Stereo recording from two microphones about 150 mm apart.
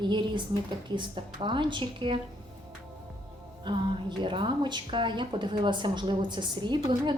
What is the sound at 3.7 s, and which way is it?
Speech, 30° right (ahead or behind).